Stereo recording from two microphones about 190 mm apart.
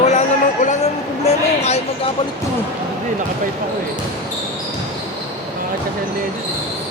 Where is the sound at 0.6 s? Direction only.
35° left (ahead or behind).